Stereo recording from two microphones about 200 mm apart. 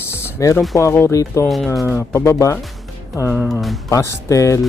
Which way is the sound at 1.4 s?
Centre (ahead or behind).